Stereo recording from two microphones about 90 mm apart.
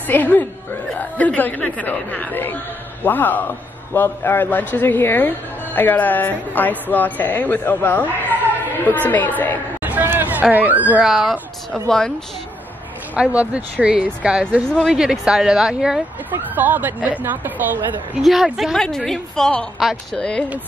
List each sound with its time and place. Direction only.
0.1 s a man's voice: 20° left (ahead or behind)
9.8 s hubbub: 20° right (ahead or behind)
11.1 s a woman's voice: 5° right (ahead or behind)
13.1 s speech: 15° right (ahead or behind)
16.3 s speech: 20° right (ahead or behind)
18.2 s a woman's voice: centre (ahead or behind)